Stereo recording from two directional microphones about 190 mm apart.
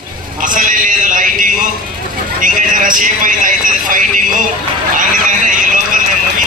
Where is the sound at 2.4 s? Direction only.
45° right (ahead or behind).